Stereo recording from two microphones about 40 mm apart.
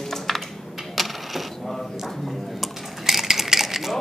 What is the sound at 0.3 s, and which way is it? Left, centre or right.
Typing, centre.